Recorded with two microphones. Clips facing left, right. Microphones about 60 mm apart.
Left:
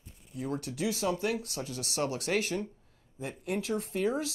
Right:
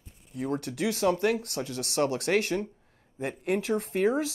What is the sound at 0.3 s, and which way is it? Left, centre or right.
Speech, right.